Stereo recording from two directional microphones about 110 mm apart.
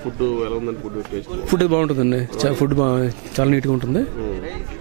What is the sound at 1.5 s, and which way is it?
Speech, 10° right (ahead or behind).